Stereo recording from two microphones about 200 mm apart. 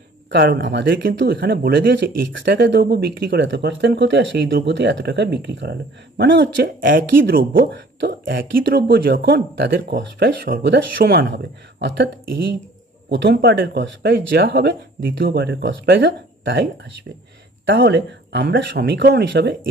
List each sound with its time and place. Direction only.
0.3 s speech: 55° right (ahead or behind)
6.8 s speech: 45° right (ahead or behind)